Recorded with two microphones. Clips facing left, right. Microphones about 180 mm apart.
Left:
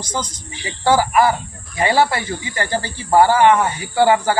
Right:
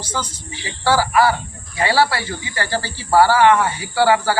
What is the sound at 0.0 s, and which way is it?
Speech, 15° left (ahead or behind).